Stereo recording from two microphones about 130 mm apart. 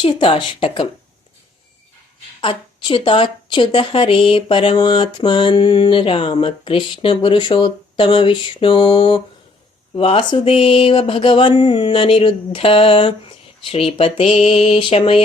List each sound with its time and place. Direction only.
0.0 s a woman's voice: 40° left (ahead or behind)
2.4 s a woman's voice: 45° left (ahead or behind)
9.9 s a sound: 45° left (ahead or behind)